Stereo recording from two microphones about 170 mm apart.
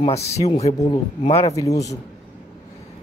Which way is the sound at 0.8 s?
30° left (ahead or behind).